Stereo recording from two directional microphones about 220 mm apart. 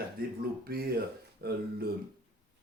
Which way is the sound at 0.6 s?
45° right (ahead or behind).